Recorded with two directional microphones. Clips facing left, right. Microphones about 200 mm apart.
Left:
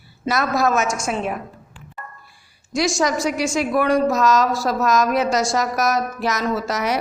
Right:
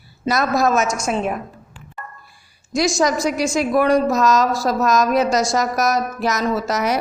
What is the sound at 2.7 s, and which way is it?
A woman's voice, 40° right (ahead or behind).